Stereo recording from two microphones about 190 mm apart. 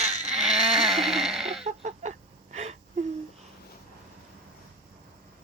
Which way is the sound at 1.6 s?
35° right (ahead or behind).